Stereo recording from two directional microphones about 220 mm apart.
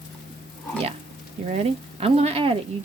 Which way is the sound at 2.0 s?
25° right (ahead or behind).